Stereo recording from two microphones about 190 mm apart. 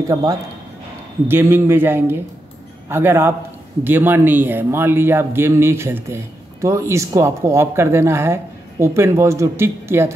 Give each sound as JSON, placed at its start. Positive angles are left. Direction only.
{"t": 0.1, "sound": "a man's voice", "side_deg": -20}